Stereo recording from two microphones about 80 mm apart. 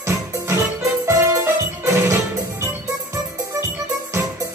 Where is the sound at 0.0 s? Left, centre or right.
Right.